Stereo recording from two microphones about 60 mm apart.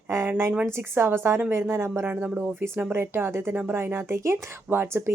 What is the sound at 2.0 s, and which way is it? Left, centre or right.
Speech, right.